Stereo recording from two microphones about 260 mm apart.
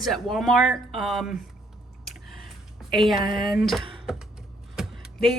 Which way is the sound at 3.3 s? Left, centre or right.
Left.